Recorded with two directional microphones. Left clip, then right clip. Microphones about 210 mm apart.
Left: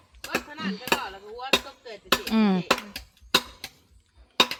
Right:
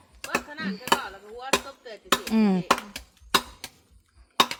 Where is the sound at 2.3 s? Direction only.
15° right (ahead or behind).